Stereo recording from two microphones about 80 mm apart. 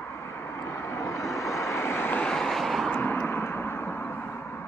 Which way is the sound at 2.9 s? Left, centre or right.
Left.